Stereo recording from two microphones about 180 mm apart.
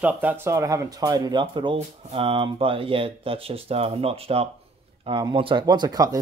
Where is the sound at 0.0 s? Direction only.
10° right (ahead or behind).